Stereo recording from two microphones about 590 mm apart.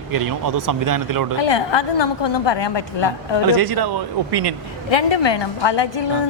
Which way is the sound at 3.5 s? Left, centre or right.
Right.